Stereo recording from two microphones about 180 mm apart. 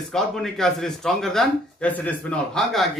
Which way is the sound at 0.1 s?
Centre (ahead or behind).